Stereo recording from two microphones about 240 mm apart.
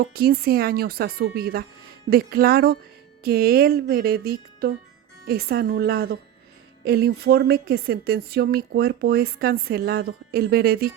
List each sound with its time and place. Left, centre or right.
0.0 s a woman's voice: right